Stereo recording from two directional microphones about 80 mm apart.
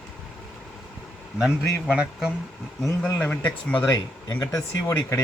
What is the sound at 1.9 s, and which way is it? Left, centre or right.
Speech, centre.